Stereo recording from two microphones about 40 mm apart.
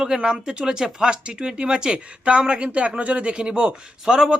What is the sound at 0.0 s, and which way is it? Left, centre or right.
Speech, centre.